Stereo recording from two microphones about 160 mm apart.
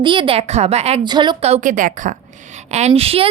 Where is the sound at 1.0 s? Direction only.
30° right (ahead or behind).